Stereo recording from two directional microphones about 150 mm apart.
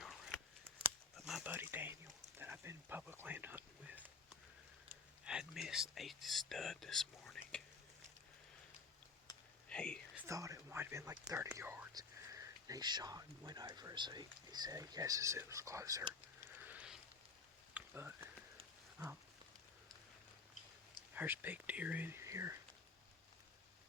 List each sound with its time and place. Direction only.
0.0 s scissors: centre (ahead or behind)
1.1 s a sound: centre (ahead or behind)
1.5 s speech: 15° right (ahead or behind)
5.2 s speech: 5° right (ahead or behind)
9.3 s a sound: 25° left (ahead or behind)
9.6 s whispering: 5° left (ahead or behind)
10.2 s speech: 20° right (ahead or behind)
16.6 s a sound: 10° right (ahead or behind)
19.0 s speech: 20° right (ahead or behind)
21.2 s speech: 10° right (ahead or behind)